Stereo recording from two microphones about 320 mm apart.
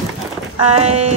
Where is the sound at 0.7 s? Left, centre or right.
Centre.